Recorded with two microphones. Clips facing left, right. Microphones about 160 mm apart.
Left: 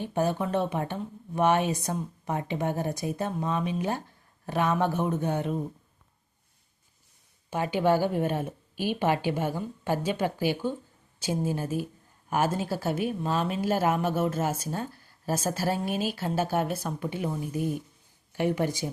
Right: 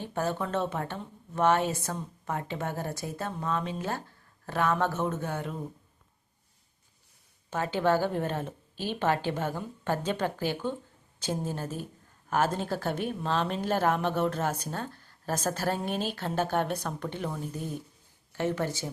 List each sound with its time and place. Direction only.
0.0 s speech: 15° left (ahead or behind)
7.5 s speech: 15° left (ahead or behind)